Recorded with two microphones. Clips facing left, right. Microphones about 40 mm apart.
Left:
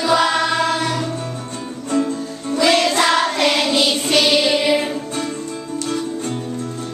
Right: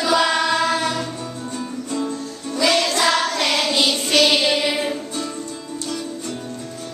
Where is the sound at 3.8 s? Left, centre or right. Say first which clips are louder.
Left 1 dB; left.